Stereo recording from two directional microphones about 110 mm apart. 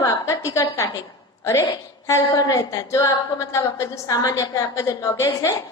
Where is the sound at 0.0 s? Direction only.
30° left (ahead or behind).